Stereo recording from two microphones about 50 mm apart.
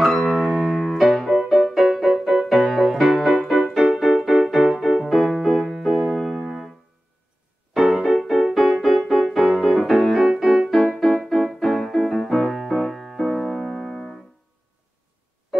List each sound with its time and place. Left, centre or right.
0.3 s music: centre
7.9 s music: centre
10.1 s keyboard: centre
11.2 s music: centre